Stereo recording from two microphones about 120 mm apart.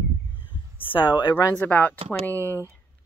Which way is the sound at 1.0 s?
40° left (ahead or behind).